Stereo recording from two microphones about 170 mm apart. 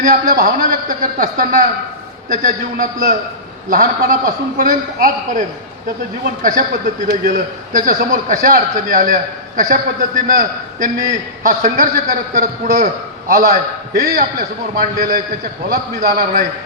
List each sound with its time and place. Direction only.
0.0 s a man's voice: 50° right (ahead or behind)
6.4 s a man's voice: 50° right (ahead or behind)